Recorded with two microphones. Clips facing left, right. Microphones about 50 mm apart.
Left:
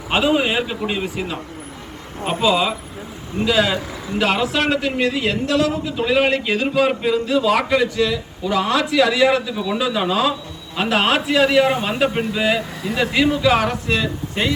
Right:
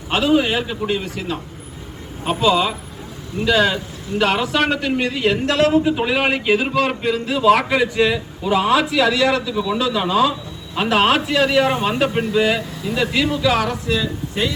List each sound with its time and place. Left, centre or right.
0.1 s a man's voice: centre
5.5 s speech: right
6.1 s a man's voice: centre
6.7 s a man's voice: centre
7.9 s a man's voice: right; by 9.1 s centre
9.1 s a man's voice: centre; by 13.9 s left